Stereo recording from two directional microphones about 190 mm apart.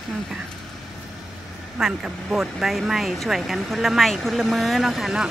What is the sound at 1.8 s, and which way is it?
Speech, centre (ahead or behind).